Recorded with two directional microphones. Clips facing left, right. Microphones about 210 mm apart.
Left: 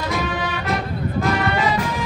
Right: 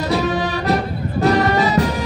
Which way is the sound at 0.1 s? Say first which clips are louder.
Right 7 dB; 40° right (ahead or behind).